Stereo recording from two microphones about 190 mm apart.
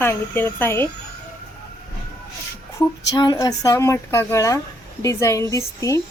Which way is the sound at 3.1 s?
20° left (ahead or behind).